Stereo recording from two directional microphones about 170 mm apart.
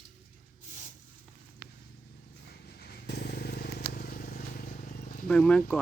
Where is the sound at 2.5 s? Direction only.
70° left (ahead or behind).